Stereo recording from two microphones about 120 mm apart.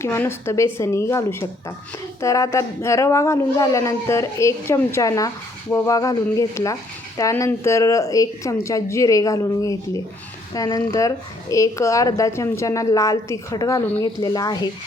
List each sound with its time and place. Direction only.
0.0 s a woman's voice: 20° left (ahead or behind)